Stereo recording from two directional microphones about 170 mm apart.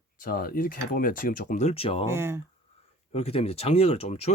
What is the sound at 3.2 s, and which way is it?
Speech, 35° left (ahead or behind).